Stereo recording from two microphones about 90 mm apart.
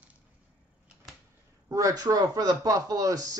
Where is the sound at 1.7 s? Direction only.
45° right (ahead or behind).